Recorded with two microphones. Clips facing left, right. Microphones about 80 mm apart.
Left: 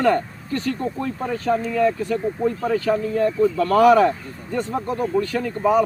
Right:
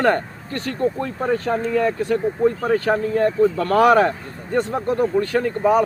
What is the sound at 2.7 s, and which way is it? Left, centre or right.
Speech, right.